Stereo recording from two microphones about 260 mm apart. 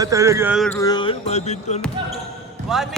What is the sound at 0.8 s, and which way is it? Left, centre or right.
Speech, centre.